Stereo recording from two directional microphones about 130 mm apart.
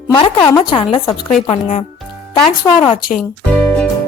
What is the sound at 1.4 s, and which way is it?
Speech, 60° left (ahead or behind).